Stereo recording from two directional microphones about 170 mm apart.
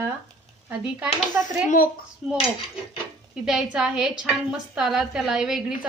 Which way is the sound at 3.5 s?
5° right (ahead or behind).